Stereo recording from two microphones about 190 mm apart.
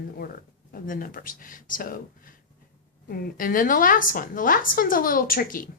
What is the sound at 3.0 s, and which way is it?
A woman's voice, 50° left (ahead or behind).